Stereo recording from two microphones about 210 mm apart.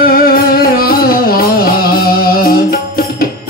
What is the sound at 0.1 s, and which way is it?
Music, 45° left (ahead or behind).